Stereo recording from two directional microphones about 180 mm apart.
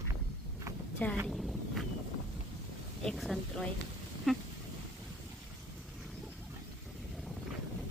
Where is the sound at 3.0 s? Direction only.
Centre (ahead or behind).